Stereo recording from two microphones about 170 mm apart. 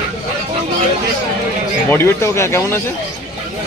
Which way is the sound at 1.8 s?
15° left (ahead or behind).